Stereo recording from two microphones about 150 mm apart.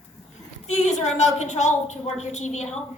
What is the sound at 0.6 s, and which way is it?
A woman's voice, 50° left (ahead or behind).